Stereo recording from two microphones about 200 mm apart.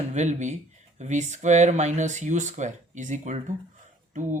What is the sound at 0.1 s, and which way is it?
Speech, 35° right (ahead or behind).